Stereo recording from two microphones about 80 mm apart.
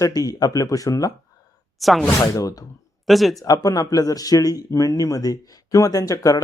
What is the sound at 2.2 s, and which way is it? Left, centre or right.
Speech, left.